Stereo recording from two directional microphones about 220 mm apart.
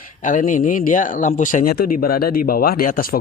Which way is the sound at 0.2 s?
35° left (ahead or behind).